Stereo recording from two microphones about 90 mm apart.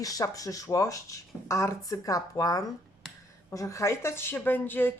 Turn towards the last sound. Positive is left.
turn(degrees=20)  # may be behind; listen again after turning